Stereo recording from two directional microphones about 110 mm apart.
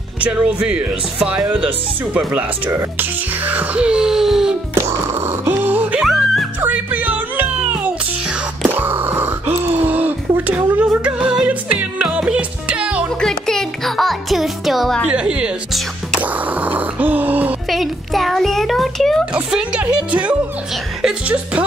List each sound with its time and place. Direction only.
0.2 s speech: 10° right (ahead or behind)
4.7 s music: 25° right (ahead or behind)
6.0 s music: centre (ahead or behind)
6.6 s music: 15° right (ahead or behind)
8.6 s a sound: 20° right (ahead or behind)
13.2 s music: 5° left (ahead or behind)
16.2 s a sound: 15° right (ahead or behind)
17.6 s a child's voice: centre (ahead or behind)
19.3 s speech: 10° right (ahead or behind)